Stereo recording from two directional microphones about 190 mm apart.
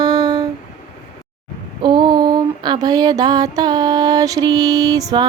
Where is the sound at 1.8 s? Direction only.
25° right (ahead or behind).